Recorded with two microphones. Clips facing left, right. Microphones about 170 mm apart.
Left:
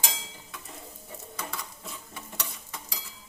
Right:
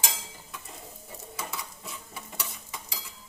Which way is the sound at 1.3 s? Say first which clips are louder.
Right 1 dB; 5° right (ahead or behind).